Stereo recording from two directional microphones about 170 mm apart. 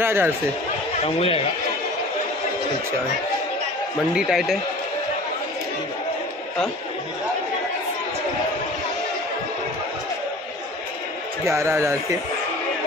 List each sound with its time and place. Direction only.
0.0 s speech: 15° right (ahead or behind)
1.0 s speech: 35° left (ahead or behind)
4.1 s a man's voice: 5° right (ahead or behind)
11.4 s speech: 15° right (ahead or behind)